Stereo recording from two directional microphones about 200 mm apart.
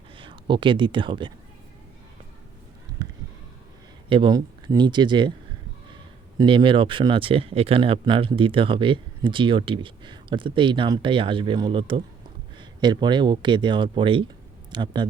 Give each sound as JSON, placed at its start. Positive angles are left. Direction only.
{"t": 0.2, "sound": "speech", "side_deg": -25}
{"t": 4.1, "sound": "speech", "side_deg": -25}
{"t": 6.3, "sound": "speech", "side_deg": -25}